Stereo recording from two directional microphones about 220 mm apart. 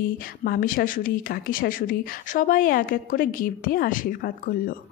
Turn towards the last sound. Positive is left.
turn(degrees=40)  # may be behind; listen again after turning